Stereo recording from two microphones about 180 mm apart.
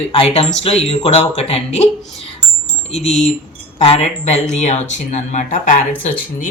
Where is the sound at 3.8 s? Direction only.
35° left (ahead or behind).